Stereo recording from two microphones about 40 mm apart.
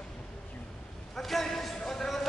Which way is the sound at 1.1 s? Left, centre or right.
Centre.